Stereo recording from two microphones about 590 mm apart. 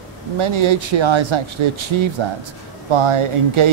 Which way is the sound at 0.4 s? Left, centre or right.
Right.